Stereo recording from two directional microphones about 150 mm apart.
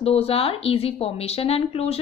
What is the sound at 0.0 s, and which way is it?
A woman's voice, 40° left (ahead or behind).